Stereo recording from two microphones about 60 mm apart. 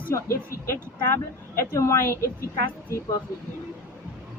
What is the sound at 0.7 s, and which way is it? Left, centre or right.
Speech, left.